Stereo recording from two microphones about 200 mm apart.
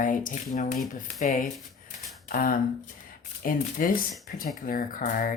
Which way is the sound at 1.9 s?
45° left (ahead or behind).